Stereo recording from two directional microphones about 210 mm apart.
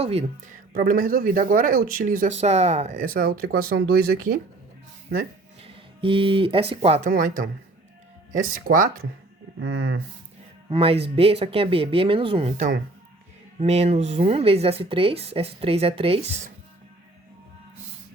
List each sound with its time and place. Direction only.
0.0 s speech: 30° right (ahead or behind); by 4.2 s 45° right (ahead or behind)
5.6 s speech: 25° right (ahead or behind); by 8.9 s 40° right (ahead or behind)
9.6 s speech: 50° right (ahead or behind)
10.7 s speech: 25° right (ahead or behind)